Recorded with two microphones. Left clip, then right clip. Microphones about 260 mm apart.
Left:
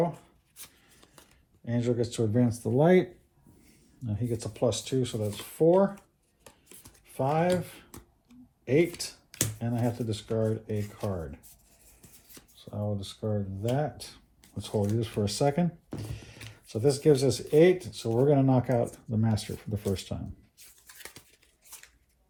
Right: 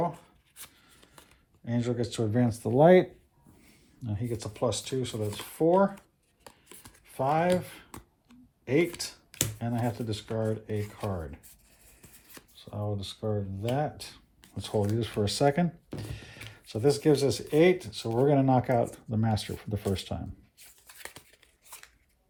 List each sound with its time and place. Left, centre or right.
0.6 s shuffling cards: centre
1.6 s speech: right
7.0 s speech: right
7.9 s computer keyboard: right
9.6 s speech: right
10.8 s speech: right
12.5 s speech: right
16.0 s music: right
16.6 s speech: right
20.6 s a sound: centre